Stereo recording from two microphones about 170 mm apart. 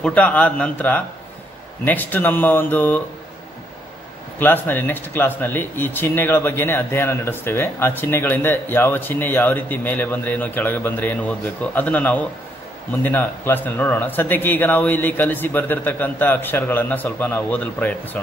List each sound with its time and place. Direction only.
0.0 s speech: 10° left (ahead or behind)
4.4 s speech: 10° left (ahead or behind)